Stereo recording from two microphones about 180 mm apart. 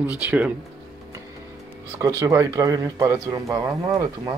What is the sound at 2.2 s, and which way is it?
Speech, 20° right (ahead or behind).